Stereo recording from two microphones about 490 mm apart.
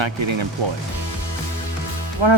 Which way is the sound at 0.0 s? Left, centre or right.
Right.